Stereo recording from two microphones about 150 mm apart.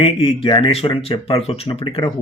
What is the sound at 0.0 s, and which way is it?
Speech, 35° left (ahead or behind).